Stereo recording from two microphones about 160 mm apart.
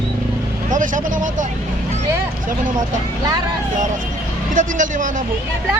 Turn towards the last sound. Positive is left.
turn(degrees=-55)  # may be behind; listen again after turning